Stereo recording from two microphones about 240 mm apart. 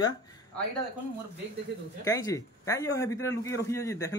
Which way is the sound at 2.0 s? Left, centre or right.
Centre.